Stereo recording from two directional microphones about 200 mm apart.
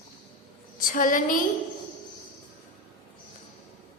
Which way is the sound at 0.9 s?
40° left (ahead or behind).